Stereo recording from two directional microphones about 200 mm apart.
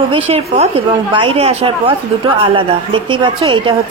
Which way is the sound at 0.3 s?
30° right (ahead or behind).